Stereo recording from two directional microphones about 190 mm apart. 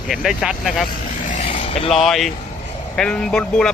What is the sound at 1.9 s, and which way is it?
Speech, centre (ahead or behind).